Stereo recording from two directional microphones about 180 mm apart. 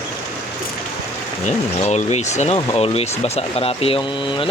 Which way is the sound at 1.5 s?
40° left (ahead or behind).